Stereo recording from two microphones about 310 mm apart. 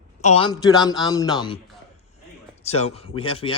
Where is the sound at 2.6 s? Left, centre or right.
Centre.